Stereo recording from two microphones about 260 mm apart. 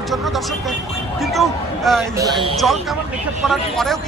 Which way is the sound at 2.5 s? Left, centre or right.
Centre.